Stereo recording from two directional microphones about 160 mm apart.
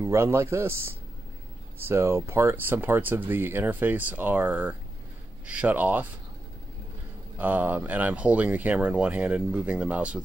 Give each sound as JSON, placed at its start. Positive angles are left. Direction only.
{"t": 0.0, "sound": "speech", "side_deg": -15}
{"t": 7.3, "sound": "speech", "side_deg": -10}